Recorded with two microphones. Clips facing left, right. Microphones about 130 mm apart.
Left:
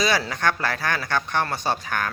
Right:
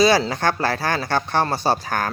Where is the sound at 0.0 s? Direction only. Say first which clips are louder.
Right 6 dB; 30° right (ahead or behind).